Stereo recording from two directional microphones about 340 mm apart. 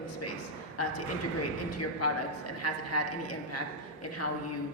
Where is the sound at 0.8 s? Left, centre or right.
Left.